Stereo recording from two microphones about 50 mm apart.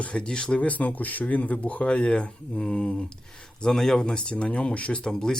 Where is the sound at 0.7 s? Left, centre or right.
Left; by 4.0 s centre.